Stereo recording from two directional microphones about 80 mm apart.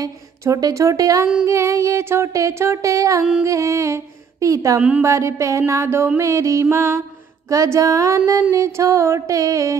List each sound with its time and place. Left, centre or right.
0.0 s speech: right
1.4 s music: right
3.4 s a sound: right
5.0 s music: right